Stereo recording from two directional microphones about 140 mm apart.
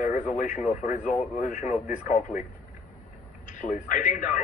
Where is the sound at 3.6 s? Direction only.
65° left (ahead or behind).